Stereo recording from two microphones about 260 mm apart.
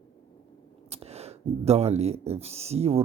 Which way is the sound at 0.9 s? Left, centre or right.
Right.